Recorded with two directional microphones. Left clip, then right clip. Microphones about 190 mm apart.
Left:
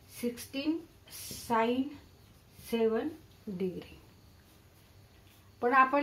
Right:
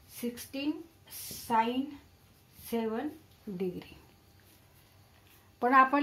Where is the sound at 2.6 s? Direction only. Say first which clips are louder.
Left 4 dB; 40° right (ahead or behind).